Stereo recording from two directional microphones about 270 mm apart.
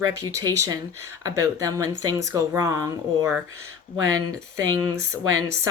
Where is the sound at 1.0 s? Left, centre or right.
Centre.